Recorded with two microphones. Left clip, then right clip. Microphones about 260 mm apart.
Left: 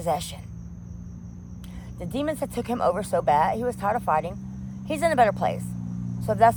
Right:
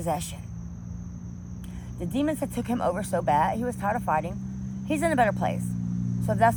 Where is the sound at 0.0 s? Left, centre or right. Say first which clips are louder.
Left 3 dB; left.